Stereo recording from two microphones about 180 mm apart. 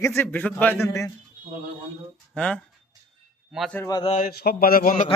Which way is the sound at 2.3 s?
5° left (ahead or behind).